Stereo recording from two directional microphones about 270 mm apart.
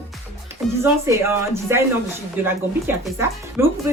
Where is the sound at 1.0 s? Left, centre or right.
Centre.